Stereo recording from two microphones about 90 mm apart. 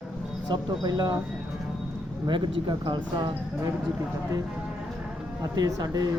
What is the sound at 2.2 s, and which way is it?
Speech, 65° right (ahead or behind).